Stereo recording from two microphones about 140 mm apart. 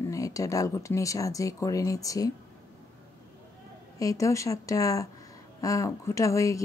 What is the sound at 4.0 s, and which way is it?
Speech, 25° left (ahead or behind).